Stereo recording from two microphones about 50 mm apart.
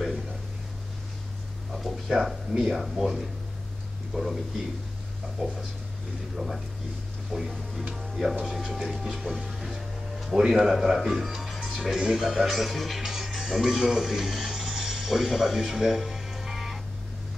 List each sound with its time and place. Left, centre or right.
1.7 s a sound: centre
2.0 s speech: centre
5.4 s speech: centre
9.6 s music: centre
10.3 s speech: centre